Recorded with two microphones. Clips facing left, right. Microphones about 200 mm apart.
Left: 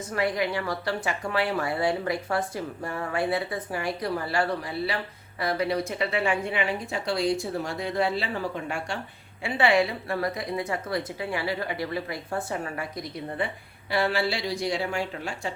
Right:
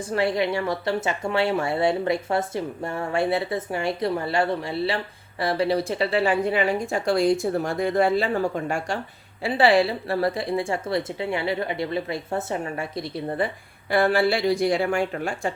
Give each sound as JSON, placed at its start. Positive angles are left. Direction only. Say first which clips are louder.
{"t": 0.0, "sound": "speech", "louder": "right 4 dB", "side_deg": -30}
{"t": 13.9, "sound": "speech", "louder": "right 6 dB", "side_deg": -50}